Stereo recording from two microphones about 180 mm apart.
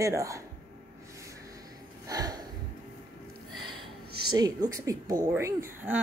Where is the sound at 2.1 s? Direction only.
20° right (ahead or behind).